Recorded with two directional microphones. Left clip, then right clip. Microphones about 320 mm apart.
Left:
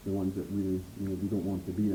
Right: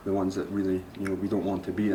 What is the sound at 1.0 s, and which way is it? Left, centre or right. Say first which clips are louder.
Speech: right 6 dB; centre.